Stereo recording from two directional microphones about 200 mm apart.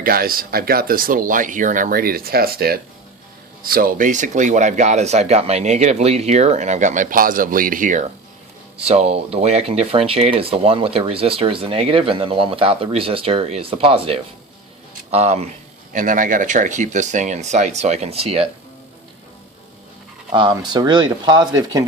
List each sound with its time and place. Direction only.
0.0 s speech: 45° right (ahead or behind); by 18.4 s 30° right (ahead or behind)
20.3 s speech: 20° right (ahead or behind)